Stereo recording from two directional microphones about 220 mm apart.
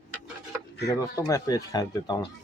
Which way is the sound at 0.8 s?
15° left (ahead or behind).